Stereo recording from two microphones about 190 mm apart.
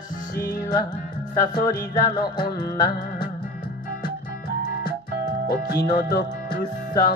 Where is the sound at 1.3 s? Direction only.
15° left (ahead or behind).